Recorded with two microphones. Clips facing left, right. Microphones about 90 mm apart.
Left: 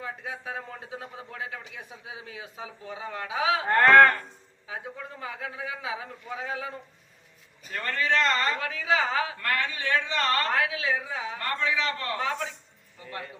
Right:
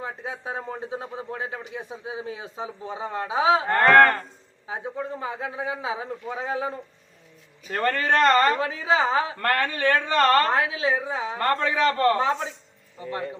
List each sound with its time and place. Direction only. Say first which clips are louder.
0.0 s a man's voice: right 3 dB; 30° right (ahead or behind)
7.7 s speech: right 5 dB; 50° right (ahead or behind)
8.5 s a man's voice: right 4 dB; 30° right (ahead or behind)
9.4 s speech: right 6 dB; 50° right (ahead or behind)
10.5 s a woman's voice: right 4 dB; 30° right (ahead or behind)
11.3 s speech: right 6 dB; 45° right (ahead or behind)
12.2 s a woman's voice: right 6 dB; 30° right (ahead or behind)